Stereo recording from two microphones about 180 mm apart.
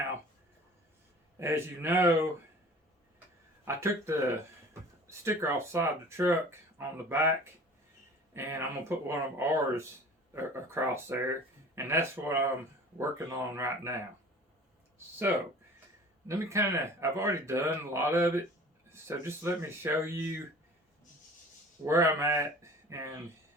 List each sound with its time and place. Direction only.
1.4 s speech: 15° right (ahead or behind)
3.7 s speech: 15° right (ahead or behind)
15.3 s speech: 15° right (ahead or behind)
21.8 s speech: 15° right (ahead or behind)